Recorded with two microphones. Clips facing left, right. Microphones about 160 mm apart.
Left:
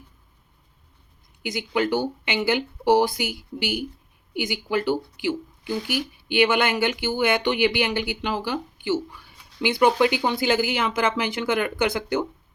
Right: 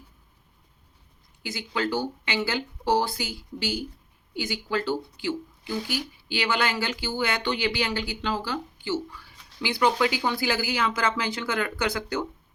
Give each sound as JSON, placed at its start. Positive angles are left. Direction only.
{"t": 1.4, "sound": "speech", "side_deg": 20}